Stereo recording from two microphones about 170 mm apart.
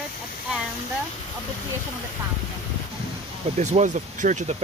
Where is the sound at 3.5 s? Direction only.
45° right (ahead or behind).